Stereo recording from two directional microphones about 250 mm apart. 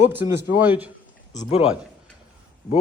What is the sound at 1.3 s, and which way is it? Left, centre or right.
Speech, centre.